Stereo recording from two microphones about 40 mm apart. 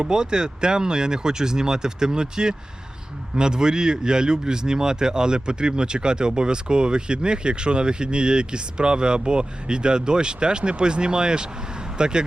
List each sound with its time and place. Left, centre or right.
0.0 s speech: centre